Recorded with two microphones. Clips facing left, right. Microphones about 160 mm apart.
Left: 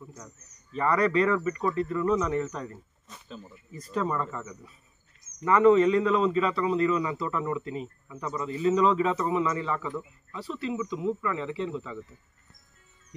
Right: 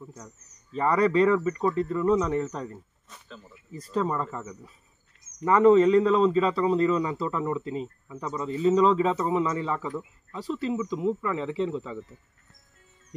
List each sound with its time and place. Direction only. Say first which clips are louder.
0.1 s speech: right 1 dB; 30° right (ahead or behind)
3.9 s speech: right 2 dB; 30° right (ahead or behind)
4.2 s speech: right 1 dB; 15° right (ahead or behind)
5.4 s a man's voice: right 2 dB; 30° right (ahead or behind)